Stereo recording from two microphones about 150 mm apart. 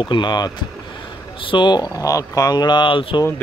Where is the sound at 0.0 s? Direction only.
30° left (ahead or behind).